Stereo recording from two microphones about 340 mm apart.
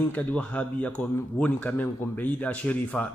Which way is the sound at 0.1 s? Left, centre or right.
Centre.